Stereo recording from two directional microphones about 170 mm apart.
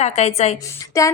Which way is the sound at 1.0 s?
20° left (ahead or behind).